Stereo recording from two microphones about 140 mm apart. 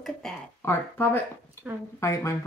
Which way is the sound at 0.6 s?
15° left (ahead or behind).